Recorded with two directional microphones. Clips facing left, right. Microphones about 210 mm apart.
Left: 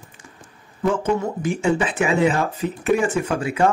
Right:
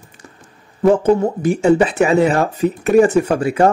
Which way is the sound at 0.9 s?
35° right (ahead or behind).